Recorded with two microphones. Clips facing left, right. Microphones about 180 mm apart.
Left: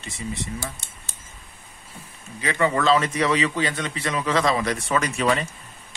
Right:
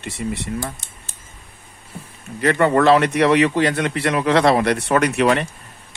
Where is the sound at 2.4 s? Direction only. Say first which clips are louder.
Right 7 dB; 60° right (ahead or behind).